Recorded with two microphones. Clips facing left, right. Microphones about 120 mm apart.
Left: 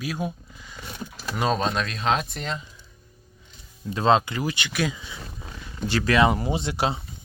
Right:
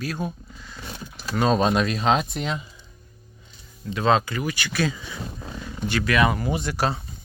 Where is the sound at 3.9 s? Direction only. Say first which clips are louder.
Left 1 dB; 30° left (ahead or behind).